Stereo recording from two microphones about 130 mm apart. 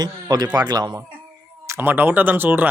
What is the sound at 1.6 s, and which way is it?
Speech, 15° right (ahead or behind).